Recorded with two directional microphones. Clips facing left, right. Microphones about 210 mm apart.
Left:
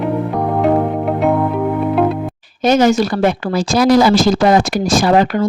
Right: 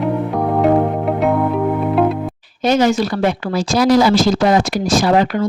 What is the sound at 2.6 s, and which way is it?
Speech, 45° left (ahead or behind).